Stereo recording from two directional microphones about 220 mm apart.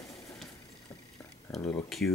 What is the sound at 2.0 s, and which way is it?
Speech, 50° left (ahead or behind).